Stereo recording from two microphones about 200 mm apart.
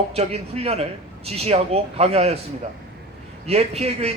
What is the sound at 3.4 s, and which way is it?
Speech, 30° right (ahead or behind).